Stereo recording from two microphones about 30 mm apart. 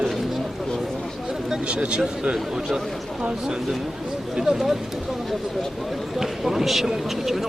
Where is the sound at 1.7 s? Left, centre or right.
Right.